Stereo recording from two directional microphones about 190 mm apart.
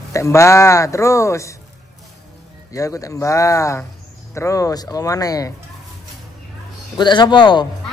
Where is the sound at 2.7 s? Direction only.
15° left (ahead or behind).